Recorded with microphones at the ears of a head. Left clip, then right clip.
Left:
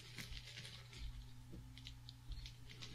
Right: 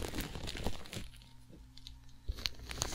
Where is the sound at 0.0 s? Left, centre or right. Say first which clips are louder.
Right 11 dB; right.